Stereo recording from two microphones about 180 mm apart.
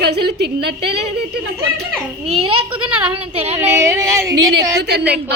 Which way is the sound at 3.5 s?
15° right (ahead or behind).